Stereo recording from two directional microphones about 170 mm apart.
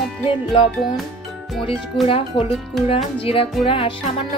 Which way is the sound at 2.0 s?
35° left (ahead or behind).